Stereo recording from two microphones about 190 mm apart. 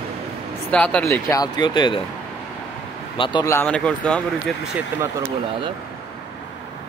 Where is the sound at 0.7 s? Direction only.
5° left (ahead or behind); by 2.0 s 25° left (ahead or behind).